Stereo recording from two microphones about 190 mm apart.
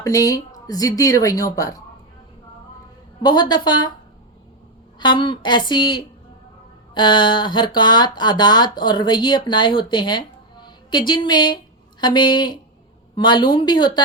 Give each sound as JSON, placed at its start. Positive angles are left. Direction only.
{"t": 0.0, "sound": "a woman's voice", "side_deg": 20}
{"t": 3.2, "sound": "speech", "side_deg": 20}
{"t": 4.9, "sound": "speech", "side_deg": 25}